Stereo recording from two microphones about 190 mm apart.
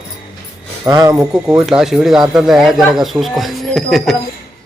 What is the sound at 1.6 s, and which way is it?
A man's voice, 5° right (ahead or behind).